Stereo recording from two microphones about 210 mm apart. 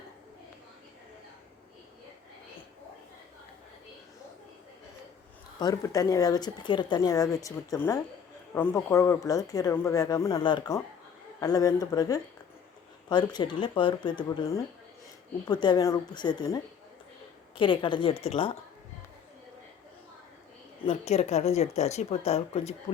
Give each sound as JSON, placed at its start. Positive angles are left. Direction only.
{"t": 5.5, "sound": "speech", "side_deg": 15}
{"t": 17.6, "sound": "speech", "side_deg": 25}
{"t": 20.8, "sound": "speech", "side_deg": 30}